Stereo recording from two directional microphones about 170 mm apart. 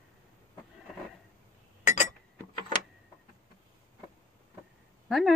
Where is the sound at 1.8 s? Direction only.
45° left (ahead or behind).